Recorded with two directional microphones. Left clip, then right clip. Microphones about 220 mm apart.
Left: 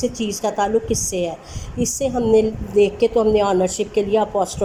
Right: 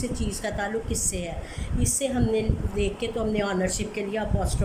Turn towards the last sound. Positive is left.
turn(degrees=15)  # may be behind; listen again after turning